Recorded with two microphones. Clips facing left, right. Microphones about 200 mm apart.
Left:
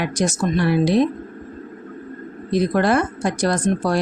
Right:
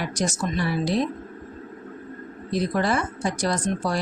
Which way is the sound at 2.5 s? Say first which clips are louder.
Left 6 dB; 65° left (ahead or behind).